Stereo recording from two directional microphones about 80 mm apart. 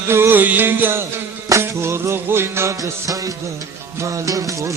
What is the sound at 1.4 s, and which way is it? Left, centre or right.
Music, right.